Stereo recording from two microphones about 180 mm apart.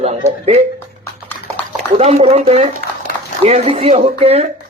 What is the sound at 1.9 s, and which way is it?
A man's voice, 35° right (ahead or behind).